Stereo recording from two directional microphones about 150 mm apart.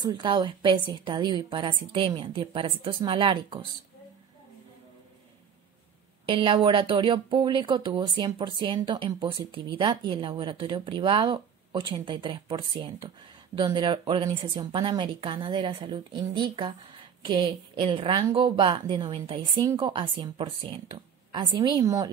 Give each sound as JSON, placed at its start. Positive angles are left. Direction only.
{"t": 0.0, "sound": "speech", "side_deg": -30}
{"t": 6.2, "sound": "speech", "side_deg": -35}